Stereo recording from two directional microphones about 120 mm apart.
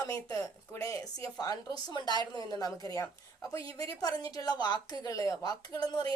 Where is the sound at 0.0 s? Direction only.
30° left (ahead or behind).